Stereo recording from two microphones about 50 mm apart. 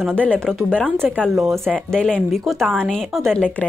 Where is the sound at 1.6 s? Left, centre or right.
Centre.